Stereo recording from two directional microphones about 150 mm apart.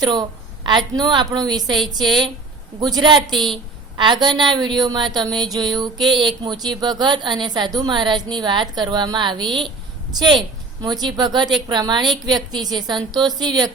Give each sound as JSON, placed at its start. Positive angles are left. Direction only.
{"t": 0.0, "sound": "a woman's voice", "side_deg": -30}